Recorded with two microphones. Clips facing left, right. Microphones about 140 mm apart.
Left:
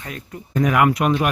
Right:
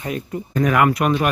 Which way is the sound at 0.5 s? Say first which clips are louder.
Even; 10° left (ahead or behind).